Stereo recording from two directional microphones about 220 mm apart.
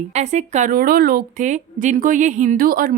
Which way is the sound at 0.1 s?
30° right (ahead or behind).